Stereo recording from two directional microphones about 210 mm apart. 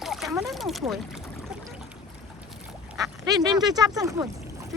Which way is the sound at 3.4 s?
20° right (ahead or behind).